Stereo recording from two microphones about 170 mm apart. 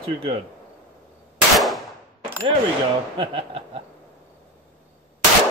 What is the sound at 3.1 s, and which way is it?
Speech, 30° right (ahead or behind).